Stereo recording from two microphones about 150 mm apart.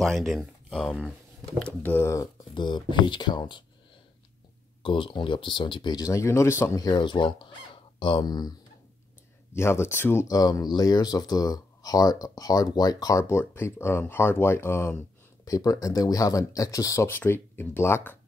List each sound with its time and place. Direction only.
0.0 s speech: centre (ahead or behind)
1.8 s speech: 15° left (ahead or behind)
2.5 s speech: 30° left (ahead or behind)
4.8 s speech: 35° left (ahead or behind)
9.5 s speech: 15° left (ahead or behind)